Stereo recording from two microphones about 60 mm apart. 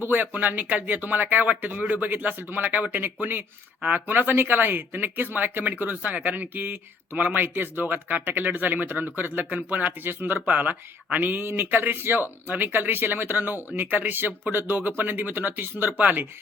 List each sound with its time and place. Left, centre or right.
0.0 s speech: right
10.0 s speech: right